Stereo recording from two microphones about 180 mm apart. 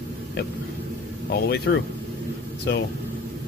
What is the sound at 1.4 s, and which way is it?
Speech, 60° left (ahead or behind).